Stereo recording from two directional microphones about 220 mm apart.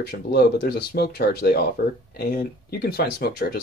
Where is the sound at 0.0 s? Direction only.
45° left (ahead or behind).